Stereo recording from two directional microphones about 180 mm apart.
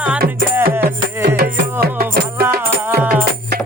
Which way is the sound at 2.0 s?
60° right (ahead or behind).